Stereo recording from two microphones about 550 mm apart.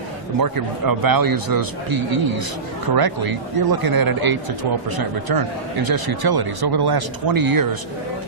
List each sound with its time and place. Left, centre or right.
0.3 s speech: right